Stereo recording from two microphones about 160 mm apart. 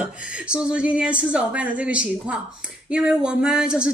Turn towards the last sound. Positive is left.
turn(degrees=-5)  # may be behind; listen again after turning